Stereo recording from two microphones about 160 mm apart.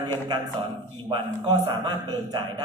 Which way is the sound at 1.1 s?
25° right (ahead or behind).